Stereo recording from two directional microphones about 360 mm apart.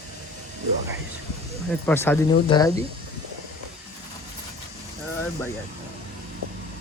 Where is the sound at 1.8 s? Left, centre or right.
Centre.